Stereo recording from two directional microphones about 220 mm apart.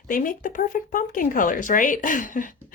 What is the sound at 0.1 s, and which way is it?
Speech, 35° left (ahead or behind).